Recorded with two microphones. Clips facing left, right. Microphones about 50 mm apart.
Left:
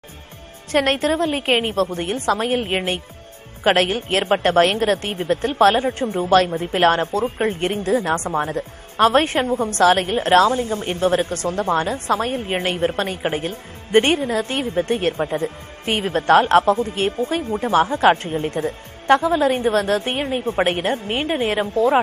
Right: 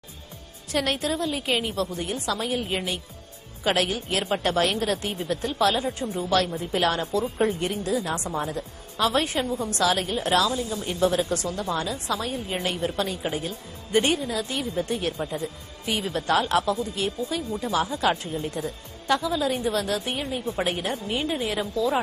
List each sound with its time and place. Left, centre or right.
0.7 s a woman's voice: left